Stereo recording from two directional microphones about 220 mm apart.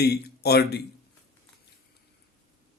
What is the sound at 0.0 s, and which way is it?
Speech, 45° left (ahead or behind).